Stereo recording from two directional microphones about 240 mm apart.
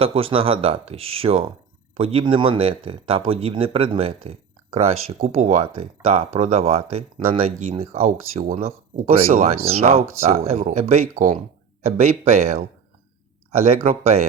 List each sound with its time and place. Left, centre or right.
0.0 s speech: right